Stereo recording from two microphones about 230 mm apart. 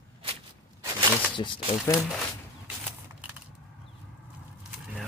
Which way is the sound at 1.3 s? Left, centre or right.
Left.